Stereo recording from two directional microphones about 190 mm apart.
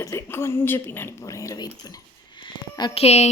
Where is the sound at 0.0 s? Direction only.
15° left (ahead or behind).